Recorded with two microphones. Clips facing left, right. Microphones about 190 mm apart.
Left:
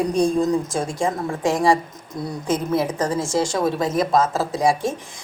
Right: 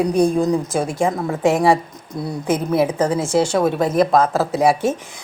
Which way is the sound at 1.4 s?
60° right (ahead or behind).